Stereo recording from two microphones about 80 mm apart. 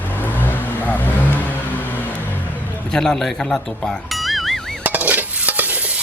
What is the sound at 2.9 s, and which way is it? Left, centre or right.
Speech, centre.